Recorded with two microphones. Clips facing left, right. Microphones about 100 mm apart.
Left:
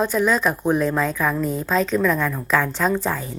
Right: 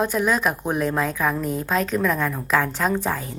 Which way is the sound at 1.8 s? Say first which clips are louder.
Left 3 dB; 50° right (ahead or behind).